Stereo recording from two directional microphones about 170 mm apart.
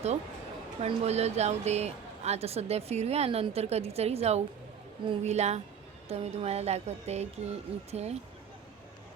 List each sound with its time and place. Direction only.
0.8 s a woman's voice: 40° right (ahead or behind)